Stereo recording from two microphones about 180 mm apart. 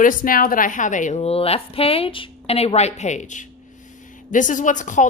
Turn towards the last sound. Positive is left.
turn(degrees=45)  # may be behind; listen again after turning